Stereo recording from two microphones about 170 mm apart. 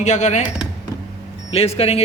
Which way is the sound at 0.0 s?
45° left (ahead or behind).